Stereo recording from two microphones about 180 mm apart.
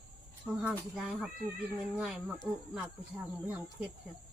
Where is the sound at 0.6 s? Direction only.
Centre (ahead or behind).